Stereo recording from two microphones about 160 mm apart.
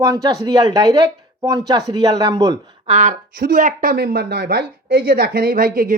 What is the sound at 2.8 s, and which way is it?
A woman's voice, 50° right (ahead or behind).